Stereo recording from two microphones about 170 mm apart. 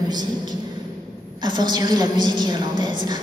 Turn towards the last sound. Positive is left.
turn(degrees=-25)  # may be behind; listen again after turning